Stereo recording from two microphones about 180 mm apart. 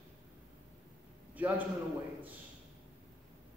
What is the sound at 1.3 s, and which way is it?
Speech, 10° right (ahead or behind).